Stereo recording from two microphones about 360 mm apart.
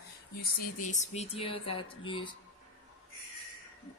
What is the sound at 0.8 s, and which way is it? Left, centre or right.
Speech, centre.